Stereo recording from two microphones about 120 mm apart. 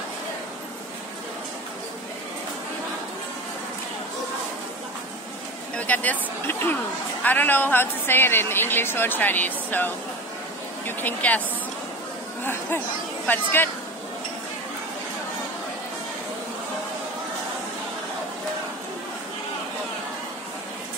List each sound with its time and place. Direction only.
5.8 s a woman's voice: 15° left (ahead or behind)
12.4 s a woman's voice: 20° left (ahead or behind)